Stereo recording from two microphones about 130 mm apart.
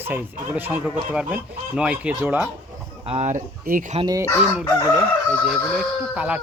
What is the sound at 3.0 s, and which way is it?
Speech, 50° right (ahead or behind).